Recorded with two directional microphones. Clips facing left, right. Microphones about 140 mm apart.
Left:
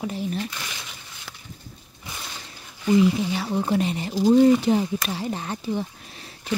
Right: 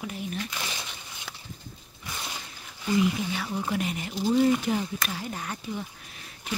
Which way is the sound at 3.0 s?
30° left (ahead or behind).